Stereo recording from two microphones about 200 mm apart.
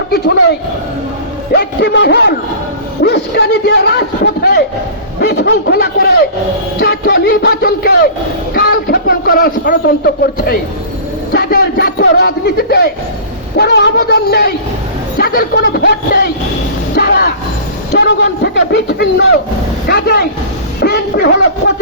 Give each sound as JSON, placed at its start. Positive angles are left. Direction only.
{"t": 1.5, "sound": "a man's voice", "side_deg": 60}
{"t": 16.9, "sound": "vehicle", "side_deg": 50}
{"t": 17.9, "sound": "a man's voice", "side_deg": 55}